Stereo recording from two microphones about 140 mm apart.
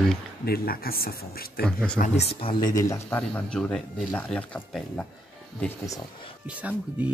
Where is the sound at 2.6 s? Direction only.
25° left (ahead or behind).